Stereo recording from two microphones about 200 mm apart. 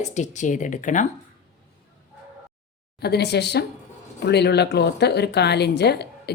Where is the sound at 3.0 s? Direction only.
55° left (ahead or behind).